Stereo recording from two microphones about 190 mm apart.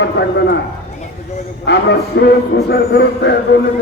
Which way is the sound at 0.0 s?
65° left (ahead or behind).